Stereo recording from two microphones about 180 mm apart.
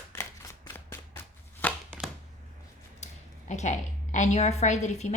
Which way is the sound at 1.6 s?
10° left (ahead or behind).